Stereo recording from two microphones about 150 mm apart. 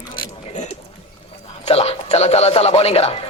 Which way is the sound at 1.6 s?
40° left (ahead or behind).